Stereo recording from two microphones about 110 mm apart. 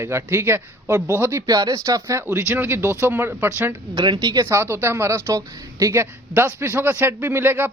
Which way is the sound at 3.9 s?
40° right (ahead or behind).